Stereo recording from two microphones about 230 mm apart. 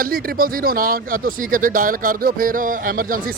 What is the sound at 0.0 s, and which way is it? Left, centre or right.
Speech, right.